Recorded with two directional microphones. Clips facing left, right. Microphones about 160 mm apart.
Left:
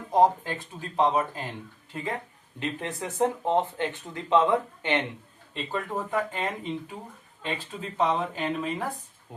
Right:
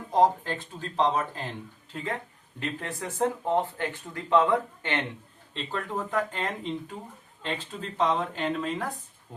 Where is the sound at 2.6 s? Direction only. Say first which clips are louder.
Left 2 dB; 20° left (ahead or behind).